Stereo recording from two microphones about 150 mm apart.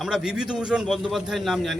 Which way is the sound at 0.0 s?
5° right (ahead or behind).